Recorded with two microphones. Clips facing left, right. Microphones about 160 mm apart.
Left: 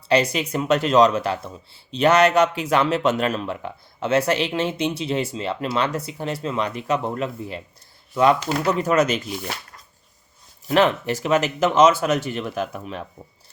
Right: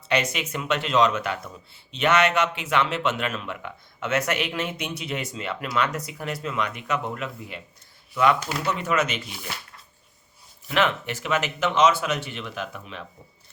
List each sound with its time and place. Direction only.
0.1 s speech: 35° left (ahead or behind)
10.7 s speech: 35° left (ahead or behind)